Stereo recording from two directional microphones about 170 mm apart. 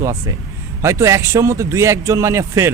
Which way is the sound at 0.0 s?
20° right (ahead or behind).